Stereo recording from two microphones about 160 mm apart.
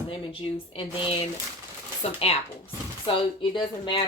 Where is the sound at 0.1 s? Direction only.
35° left (ahead or behind).